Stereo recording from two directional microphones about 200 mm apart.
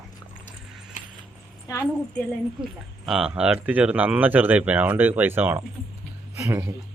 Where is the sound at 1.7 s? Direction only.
15° left (ahead or behind).